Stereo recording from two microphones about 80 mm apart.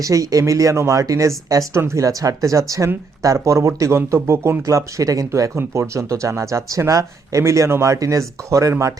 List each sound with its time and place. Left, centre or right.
0.0 s speech: right